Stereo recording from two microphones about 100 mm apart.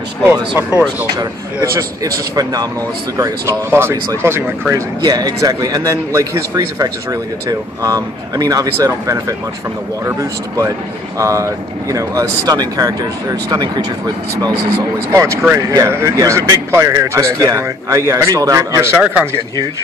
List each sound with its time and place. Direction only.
0.3 s speech: 25° right (ahead or behind)
1.1 s speech: 35° right (ahead or behind)
3.9 s speech: 35° right (ahead or behind)
4.3 s speech: 25° right (ahead or behind)
5.0 s speech: 40° right (ahead or behind)